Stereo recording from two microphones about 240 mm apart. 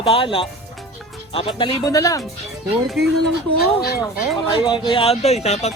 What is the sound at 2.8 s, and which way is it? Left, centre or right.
Speech, centre.